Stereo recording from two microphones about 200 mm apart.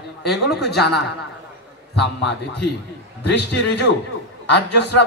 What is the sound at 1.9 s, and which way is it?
A man's voice, 60° left (ahead or behind).